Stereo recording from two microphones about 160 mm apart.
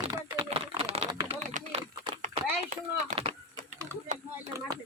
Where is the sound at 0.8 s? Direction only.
35° right (ahead or behind); by 3.2 s 50° right (ahead or behind).